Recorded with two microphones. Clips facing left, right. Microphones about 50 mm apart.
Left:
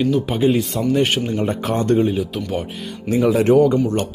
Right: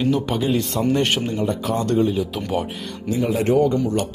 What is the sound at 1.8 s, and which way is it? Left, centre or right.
Speech, left.